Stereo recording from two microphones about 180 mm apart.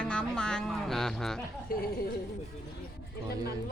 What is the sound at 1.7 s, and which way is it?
Speech, 55° left (ahead or behind).